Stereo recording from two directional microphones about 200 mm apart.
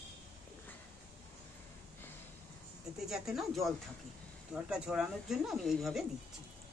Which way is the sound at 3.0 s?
Centre (ahead or behind).